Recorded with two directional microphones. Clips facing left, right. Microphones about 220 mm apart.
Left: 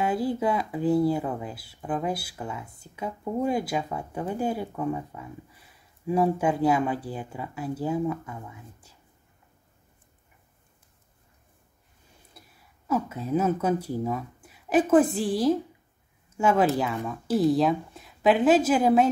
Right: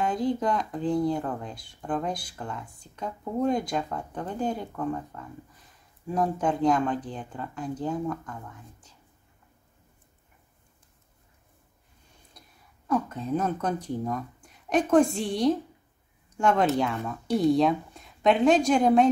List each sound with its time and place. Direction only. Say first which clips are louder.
0.0 s speech: left 1 dB; 5° left (ahead or behind)
12.4 s speech: left 2 dB; 5° left (ahead or behind)